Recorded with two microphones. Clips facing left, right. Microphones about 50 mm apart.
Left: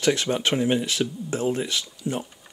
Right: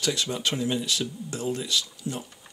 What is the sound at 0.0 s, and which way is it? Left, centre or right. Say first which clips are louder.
Speech: left 5 dB; left.